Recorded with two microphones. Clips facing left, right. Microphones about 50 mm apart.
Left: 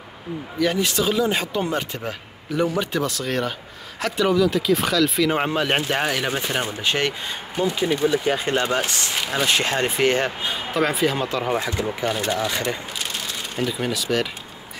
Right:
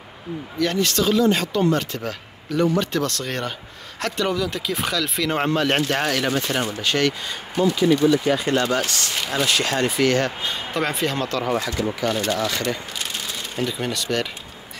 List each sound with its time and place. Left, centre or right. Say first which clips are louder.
0.6 s speech: even; centre
9.2 s speech: even; centre
9.5 s speech: even; left
13.1 s speech: even; centre